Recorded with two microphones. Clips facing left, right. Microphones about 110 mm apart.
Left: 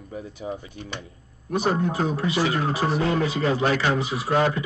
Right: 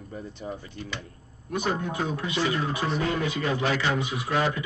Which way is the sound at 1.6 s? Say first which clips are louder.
Left 5 dB; 40° left (ahead or behind).